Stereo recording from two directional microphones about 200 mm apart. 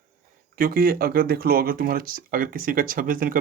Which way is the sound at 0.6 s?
45° right (ahead or behind).